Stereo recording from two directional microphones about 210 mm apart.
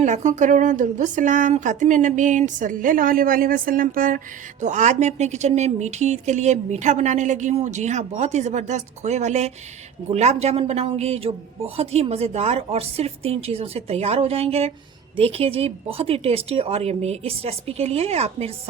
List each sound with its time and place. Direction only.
0.0 s a woman's voice: 35° right (ahead or behind)